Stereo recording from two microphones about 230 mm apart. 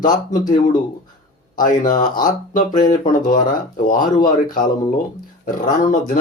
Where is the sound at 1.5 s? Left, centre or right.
Left.